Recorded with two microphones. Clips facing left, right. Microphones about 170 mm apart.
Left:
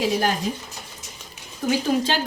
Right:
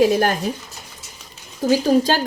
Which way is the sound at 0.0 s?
50° right (ahead or behind).